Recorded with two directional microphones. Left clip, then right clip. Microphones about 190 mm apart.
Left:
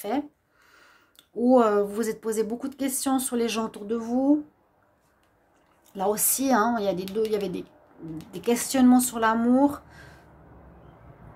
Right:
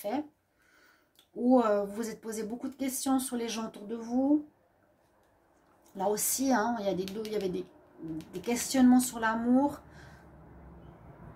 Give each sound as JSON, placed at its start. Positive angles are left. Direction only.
{"t": 0.1, "sound": "speech", "side_deg": 40}
{"t": 1.4, "sound": "speech", "side_deg": 40}
{"t": 5.9, "sound": "speech", "side_deg": 35}
{"t": 8.0, "sound": "a woman's voice", "side_deg": 0}
{"t": 8.5, "sound": "speech", "side_deg": 35}